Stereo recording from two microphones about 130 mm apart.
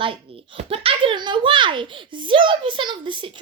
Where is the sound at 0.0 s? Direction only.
45° right (ahead or behind).